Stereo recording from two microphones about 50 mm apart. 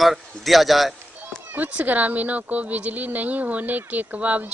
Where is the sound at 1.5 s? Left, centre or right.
Right.